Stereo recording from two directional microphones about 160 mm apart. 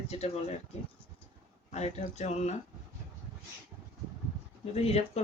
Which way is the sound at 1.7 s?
45° left (ahead or behind).